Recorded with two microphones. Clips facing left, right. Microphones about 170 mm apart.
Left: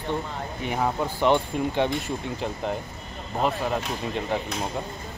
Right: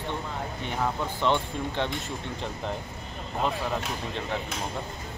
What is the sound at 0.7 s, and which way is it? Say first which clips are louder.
Speech: left 4 dB; 15° left (ahead or behind).